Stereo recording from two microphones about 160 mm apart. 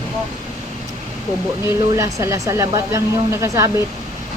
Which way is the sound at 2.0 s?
20° right (ahead or behind).